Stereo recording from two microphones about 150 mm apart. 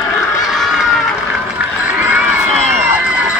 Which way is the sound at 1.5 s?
10° right (ahead or behind).